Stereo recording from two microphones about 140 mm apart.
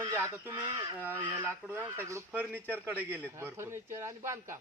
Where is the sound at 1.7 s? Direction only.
15° right (ahead or behind).